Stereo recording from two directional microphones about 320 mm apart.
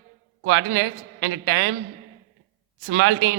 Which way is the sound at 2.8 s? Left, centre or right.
Right.